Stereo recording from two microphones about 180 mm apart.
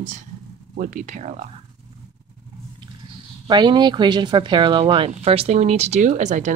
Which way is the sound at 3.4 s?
25° right (ahead or behind).